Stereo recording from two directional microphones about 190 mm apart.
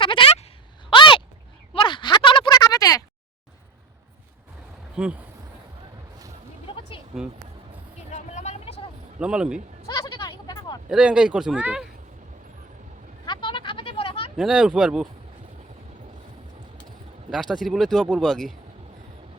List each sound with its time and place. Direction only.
0.0 s a sound: 25° left (ahead or behind)
5.0 s speech: 5° right (ahead or behind)
8.1 s vehicle: 35° left (ahead or behind)
9.1 s speech: 5° right (ahead or behind)
9.8 s a sound: 15° left (ahead or behind)
10.8 s speech: 5° right (ahead or behind)
13.2 s a sound: 25° left (ahead or behind)
14.3 s speech: 5° right (ahead or behind)
17.3 s speech: centre (ahead or behind)